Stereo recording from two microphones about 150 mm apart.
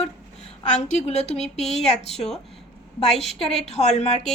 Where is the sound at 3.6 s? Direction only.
45° left (ahead or behind).